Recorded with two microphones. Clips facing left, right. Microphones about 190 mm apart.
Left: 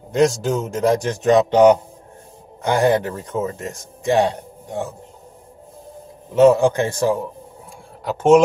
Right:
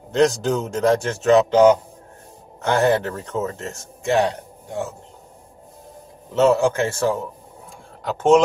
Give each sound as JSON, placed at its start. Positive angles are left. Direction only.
{"t": 0.1, "sound": "a man's voice", "side_deg": 10}
{"t": 6.3, "sound": "a man's voice", "side_deg": 15}